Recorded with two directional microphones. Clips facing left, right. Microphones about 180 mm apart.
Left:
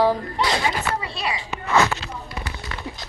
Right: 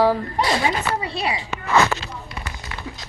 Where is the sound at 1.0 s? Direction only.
20° right (ahead or behind).